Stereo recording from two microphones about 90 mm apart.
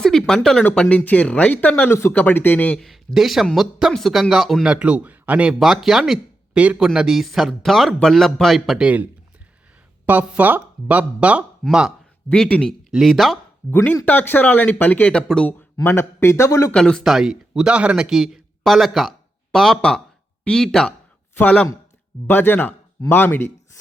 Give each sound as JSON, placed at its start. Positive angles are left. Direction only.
{"t": 0.0, "sound": "a sound", "side_deg": 5}
{"t": 0.6, "sound": "speech", "side_deg": 10}
{"t": 1.9, "sound": "speech", "side_deg": 30}
{"t": 2.7, "sound": "speech", "side_deg": 0}
{"t": 4.7, "sound": "speech", "side_deg": -15}
{"t": 5.5, "sound": "speech", "side_deg": -5}
{"t": 10.1, "sound": "speech", "side_deg": -20}
{"t": 12.3, "sound": "speech", "side_deg": 10}
{"t": 12.9, "sound": "speech", "side_deg": 0}
{"t": 14.0, "sound": "speech", "side_deg": 20}
{"t": 16.7, "sound": "speech", "side_deg": 10}
{"t": 17.0, "sound": "speech", "side_deg": -5}